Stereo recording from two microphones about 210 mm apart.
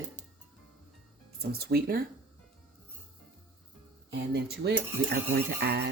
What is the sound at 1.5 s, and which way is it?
Speech, 45° right (ahead or behind).